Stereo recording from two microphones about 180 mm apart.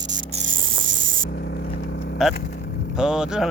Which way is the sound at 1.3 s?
65° left (ahead or behind).